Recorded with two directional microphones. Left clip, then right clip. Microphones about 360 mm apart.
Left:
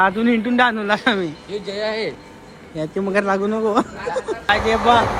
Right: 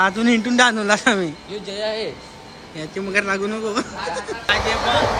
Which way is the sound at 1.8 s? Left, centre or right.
Centre.